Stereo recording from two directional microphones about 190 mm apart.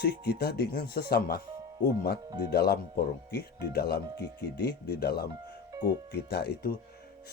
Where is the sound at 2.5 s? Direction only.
55° left (ahead or behind).